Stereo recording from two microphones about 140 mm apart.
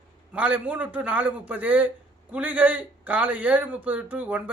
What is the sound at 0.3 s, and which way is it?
Speech, 10° right (ahead or behind).